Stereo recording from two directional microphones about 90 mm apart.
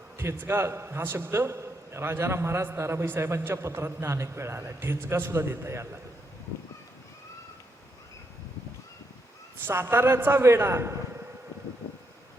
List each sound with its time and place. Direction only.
0.2 s a man's voice: 25° right (ahead or behind)
9.6 s a man's voice: 25° right (ahead or behind)